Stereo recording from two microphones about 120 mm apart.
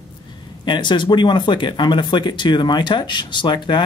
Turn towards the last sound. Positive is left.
turn(degrees=40)  # may be behind; listen again after turning